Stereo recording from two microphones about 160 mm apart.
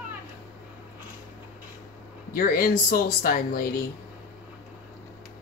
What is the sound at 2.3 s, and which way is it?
Speech, 65° left (ahead or behind).